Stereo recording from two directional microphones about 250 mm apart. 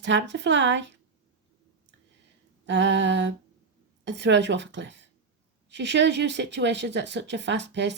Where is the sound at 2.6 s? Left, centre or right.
Right.